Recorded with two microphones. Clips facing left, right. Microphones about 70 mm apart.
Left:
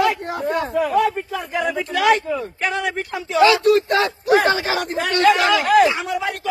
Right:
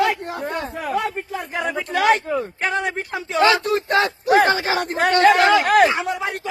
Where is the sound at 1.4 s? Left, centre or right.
Right.